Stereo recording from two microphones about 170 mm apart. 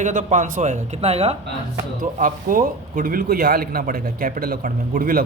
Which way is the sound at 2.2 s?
55° right (ahead or behind).